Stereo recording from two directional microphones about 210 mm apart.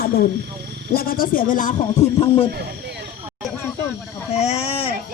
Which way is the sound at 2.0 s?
30° left (ahead or behind).